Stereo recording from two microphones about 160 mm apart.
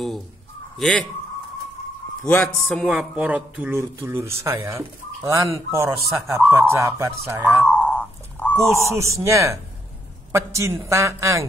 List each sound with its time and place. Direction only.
0.7 s speech: 5° left (ahead or behind)
2.2 s speech: 10° left (ahead or behind)
2.8 s speech: 5° right (ahead or behind)
7.8 s wild animals: 10° left (ahead or behind)
8.5 s speech: 15° right (ahead or behind)